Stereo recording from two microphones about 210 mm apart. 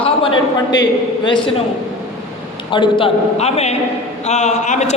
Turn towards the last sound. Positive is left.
turn(degrees=35)  # may be behind; listen again after turning